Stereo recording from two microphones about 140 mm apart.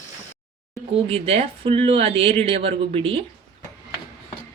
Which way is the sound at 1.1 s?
45° right (ahead or behind).